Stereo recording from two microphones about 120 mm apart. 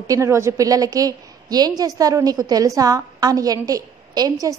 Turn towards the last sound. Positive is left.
turn(degrees=-30)  # may be behind; listen again after turning